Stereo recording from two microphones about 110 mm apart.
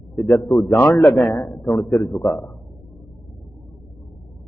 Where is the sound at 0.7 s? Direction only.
15° left (ahead or behind).